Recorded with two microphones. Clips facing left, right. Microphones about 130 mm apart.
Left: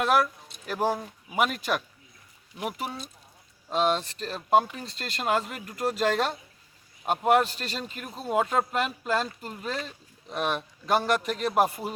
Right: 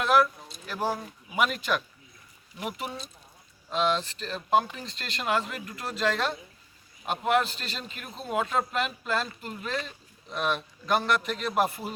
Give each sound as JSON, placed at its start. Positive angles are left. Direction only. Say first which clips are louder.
{"t": 0.0, "sound": "speech", "louder": "right 1 dB", "side_deg": 45}
{"t": 0.5, "sound": "a sound", "louder": "right 1 dB", "side_deg": 60}
{"t": 1.4, "sound": "a man's voice", "louder": "left 1 dB", "side_deg": 40}